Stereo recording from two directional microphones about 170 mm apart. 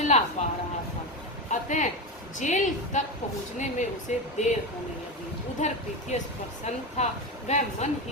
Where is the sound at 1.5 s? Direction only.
45° left (ahead or behind).